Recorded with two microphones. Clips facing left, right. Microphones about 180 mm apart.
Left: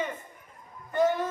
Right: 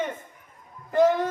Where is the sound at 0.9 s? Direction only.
90° right.